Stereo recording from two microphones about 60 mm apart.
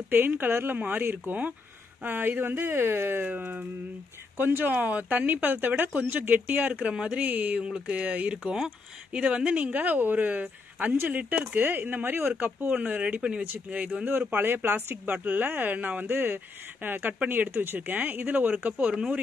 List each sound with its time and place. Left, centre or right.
0.1 s speech: right
14.3 s speech: right; by 19.1 s centre